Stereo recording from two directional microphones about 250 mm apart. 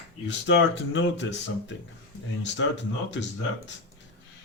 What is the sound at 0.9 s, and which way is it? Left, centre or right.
Speech, left.